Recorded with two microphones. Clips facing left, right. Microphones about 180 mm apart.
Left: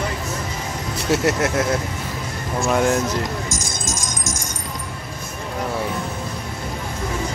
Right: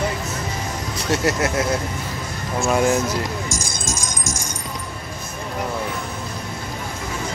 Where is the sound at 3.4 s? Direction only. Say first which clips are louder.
Even; 20° left (ahead or behind).